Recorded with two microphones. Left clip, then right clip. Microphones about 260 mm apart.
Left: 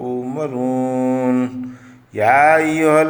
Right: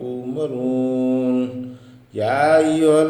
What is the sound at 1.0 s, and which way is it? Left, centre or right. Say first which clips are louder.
Mantra: left 2 dB; left.